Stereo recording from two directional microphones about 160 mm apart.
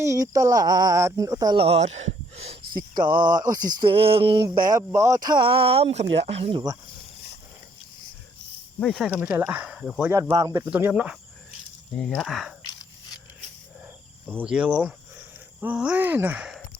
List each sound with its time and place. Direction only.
0.0 s speech: 20° right (ahead or behind)
1.6 s speech: 40° right (ahead or behind)
3.2 s speech: 25° right (ahead or behind)
4.7 s speech: 20° right (ahead or behind); by 6.6 s 40° right (ahead or behind)
8.8 s speech: 5° left (ahead or behind)
9.0 s speech: 5° right (ahead or behind)
10.1 s speech: 20° right (ahead or behind)
11.9 s speech: 5° left (ahead or behind)
14.3 s speech: 10° right (ahead or behind)